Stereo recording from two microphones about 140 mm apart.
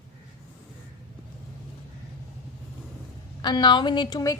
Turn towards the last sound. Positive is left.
turn(degrees=25)  # may be behind; listen again after turning